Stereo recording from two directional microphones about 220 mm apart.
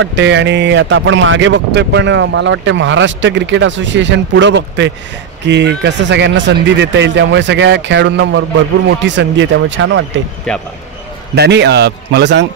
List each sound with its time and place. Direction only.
0.0 s speech: 55° right (ahead or behind)
10.5 s speech: 5° left (ahead or behind)
11.3 s a man's voice: 50° right (ahead or behind)